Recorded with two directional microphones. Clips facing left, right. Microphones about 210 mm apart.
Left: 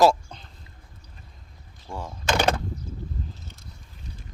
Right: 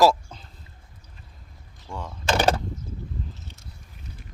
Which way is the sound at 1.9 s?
40° left (ahead or behind).